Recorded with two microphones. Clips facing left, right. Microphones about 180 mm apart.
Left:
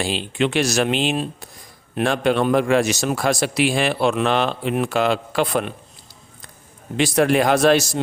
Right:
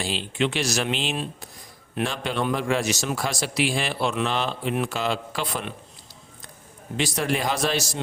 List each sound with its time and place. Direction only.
0.0 s a man's voice: 60° left (ahead or behind)
4.7 s a man's voice: 55° left (ahead or behind)
6.9 s a man's voice: 60° left (ahead or behind)